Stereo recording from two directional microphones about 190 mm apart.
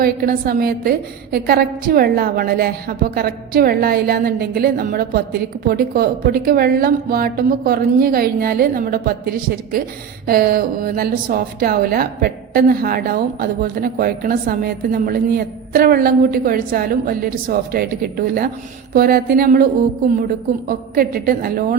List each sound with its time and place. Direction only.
0.0 s a woman's voice: 50° right (ahead or behind)
20.7 s a woman's voice: 50° right (ahead or behind)